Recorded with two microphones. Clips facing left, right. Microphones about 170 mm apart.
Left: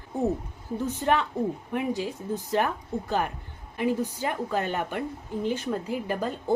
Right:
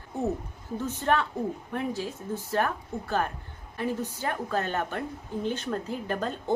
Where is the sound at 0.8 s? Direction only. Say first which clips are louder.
Left 1 dB; 15° left (ahead or behind).